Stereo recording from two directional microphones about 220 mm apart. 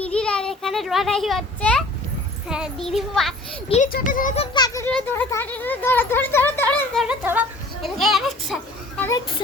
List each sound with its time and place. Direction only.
0.0 s a sound: 5° left (ahead or behind)
2.5 s speech: centre (ahead or behind)
3.7 s speech: 35° left (ahead or behind)
4.5 s speech: 15° left (ahead or behind)
7.0 s speech: 5° right (ahead or behind)
9.0 s speech: 10° left (ahead or behind)